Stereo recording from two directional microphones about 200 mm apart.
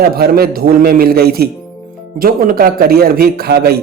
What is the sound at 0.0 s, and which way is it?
Speech, 50° right (ahead or behind).